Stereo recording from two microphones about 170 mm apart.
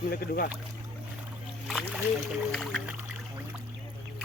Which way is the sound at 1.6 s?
Centre (ahead or behind).